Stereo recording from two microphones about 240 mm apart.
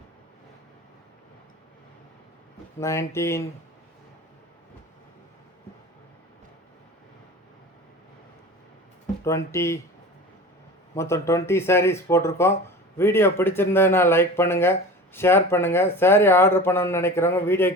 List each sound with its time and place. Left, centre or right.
2.8 s speech: centre
9.2 s speech: centre
10.9 s speech: centre